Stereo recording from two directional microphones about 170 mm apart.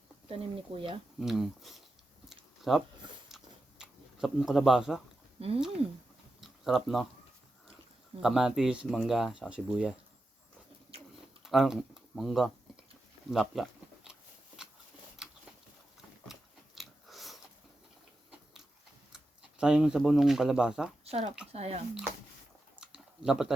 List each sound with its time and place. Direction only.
0.3 s speech: 35° right (ahead or behind)
1.2 s speech: centre (ahead or behind)
2.3 s a sound: centre (ahead or behind)
3.2 s tick-tock: centre (ahead or behind)
6.4 s speech: centre (ahead or behind)
8.2 s speech: 5° right (ahead or behind)
11.4 s speech: centre (ahead or behind)
13.3 s a sound: centre (ahead or behind)
16.3 s biting: centre (ahead or behind)
19.1 s speech: 5° right (ahead or behind)
21.0 s speech: 40° right (ahead or behind)
22.8 s a sound: 5° right (ahead or behind)